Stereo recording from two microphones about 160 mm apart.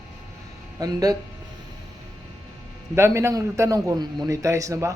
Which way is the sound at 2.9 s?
15° right (ahead or behind).